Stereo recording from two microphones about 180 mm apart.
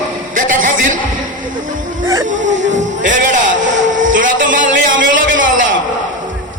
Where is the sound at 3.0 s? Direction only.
45° right (ahead or behind).